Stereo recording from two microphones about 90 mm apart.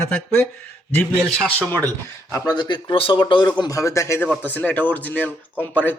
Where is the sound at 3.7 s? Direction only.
35° left (ahead or behind).